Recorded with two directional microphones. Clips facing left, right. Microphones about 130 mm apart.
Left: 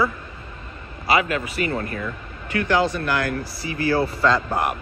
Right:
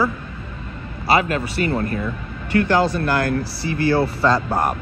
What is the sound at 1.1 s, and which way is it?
Speech, 35° right (ahead or behind).